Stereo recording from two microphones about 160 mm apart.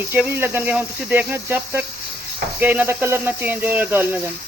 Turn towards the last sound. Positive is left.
turn(degrees=-10)  # may be behind; listen again after turning